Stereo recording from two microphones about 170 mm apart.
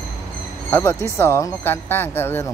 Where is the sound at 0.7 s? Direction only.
15° left (ahead or behind).